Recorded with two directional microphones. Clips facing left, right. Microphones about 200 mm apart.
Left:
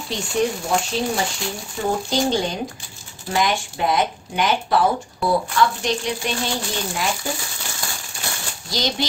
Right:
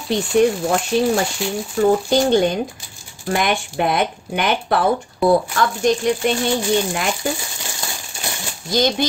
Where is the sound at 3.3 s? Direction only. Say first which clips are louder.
Right 2 dB; 60° right (ahead or behind).